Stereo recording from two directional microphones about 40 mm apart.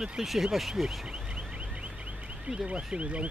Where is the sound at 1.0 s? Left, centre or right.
Right.